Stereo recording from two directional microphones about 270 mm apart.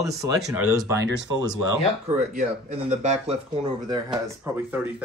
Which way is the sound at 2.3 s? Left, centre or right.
Right.